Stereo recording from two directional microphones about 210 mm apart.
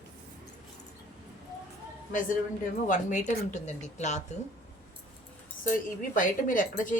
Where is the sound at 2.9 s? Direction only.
35° left (ahead or behind).